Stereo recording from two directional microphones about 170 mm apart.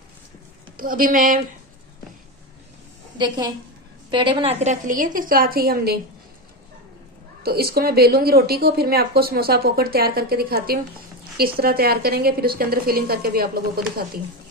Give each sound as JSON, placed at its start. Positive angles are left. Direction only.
{"t": 0.7, "sound": "speech", "side_deg": -55}
{"t": 3.2, "sound": "a woman's voice", "side_deg": -25}
{"t": 7.4, "sound": "speech", "side_deg": -65}